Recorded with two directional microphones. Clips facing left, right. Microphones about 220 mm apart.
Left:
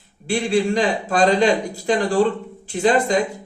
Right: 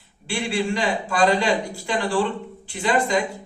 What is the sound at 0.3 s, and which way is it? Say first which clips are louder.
A man's voice: left 5 dB; 40° left (ahead or behind).